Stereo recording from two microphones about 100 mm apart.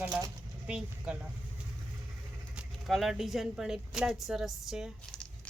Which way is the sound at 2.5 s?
Centre (ahead or behind).